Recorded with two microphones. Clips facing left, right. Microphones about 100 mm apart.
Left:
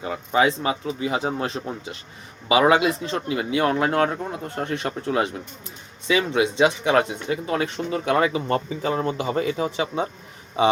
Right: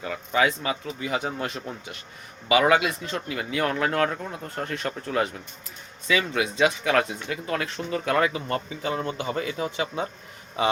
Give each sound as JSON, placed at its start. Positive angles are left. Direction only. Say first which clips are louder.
{"t": 0.0, "sound": "speech", "louder": "left 3 dB", "side_deg": 25}